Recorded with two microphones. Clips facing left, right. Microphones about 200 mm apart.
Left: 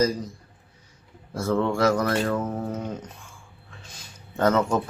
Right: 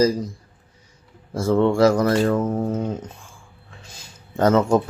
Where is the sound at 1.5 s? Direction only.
30° right (ahead or behind).